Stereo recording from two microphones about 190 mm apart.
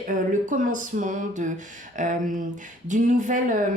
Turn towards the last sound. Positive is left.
turn(degrees=-40)  # may be behind; listen again after turning